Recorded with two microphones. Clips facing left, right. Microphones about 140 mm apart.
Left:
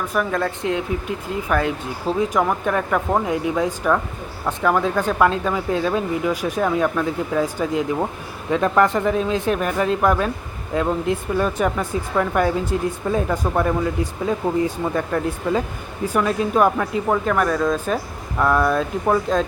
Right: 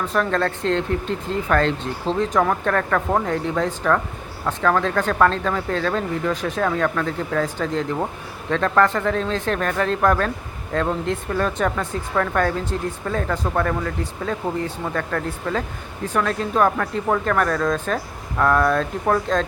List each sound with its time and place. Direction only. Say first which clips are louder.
0.0 s speech: right 1 dB; 10° left (ahead or behind)